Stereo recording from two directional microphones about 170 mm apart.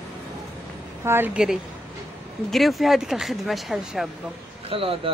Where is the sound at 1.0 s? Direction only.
15° right (ahead or behind).